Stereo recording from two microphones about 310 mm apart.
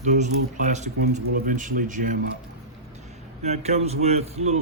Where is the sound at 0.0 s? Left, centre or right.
Right.